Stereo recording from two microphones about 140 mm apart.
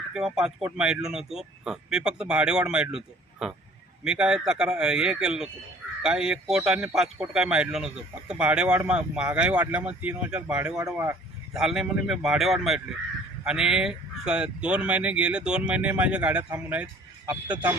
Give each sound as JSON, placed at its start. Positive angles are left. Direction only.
{"t": 0.1, "sound": "speech", "side_deg": -5}
{"t": 10.8, "sound": "speech", "side_deg": -20}
{"t": 11.5, "sound": "speech", "side_deg": -5}